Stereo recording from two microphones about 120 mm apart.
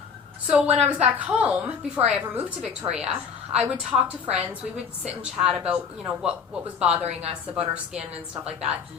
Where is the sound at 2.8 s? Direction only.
55° right (ahead or behind).